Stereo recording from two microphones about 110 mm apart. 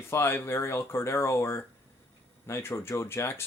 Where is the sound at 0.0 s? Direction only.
20° left (ahead or behind).